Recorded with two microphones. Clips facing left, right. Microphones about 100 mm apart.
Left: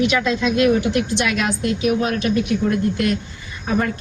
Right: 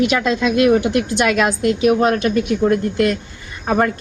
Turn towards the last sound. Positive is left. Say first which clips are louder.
# right 4 dB
turn(degrees=-50)  # may be behind; listen again after turning